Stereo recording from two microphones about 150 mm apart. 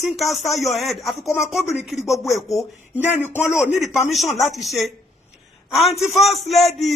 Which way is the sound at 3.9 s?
Centre (ahead or behind).